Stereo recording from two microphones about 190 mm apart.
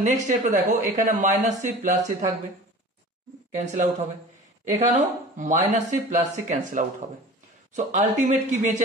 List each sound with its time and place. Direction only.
0.0 s speech: 40° right (ahead or behind)
3.5 s speech: 40° right (ahead or behind)